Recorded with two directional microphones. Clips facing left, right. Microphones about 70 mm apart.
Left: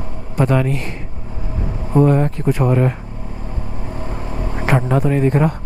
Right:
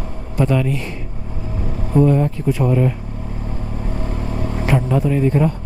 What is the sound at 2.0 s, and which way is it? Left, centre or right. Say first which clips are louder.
Speech: left 1 dB; left.